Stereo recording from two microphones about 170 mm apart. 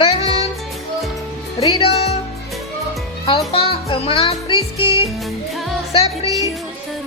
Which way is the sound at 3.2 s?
35° left (ahead or behind).